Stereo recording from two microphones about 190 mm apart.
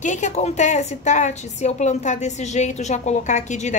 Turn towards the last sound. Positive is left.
turn(degrees=40)  # may be behind; listen again after turning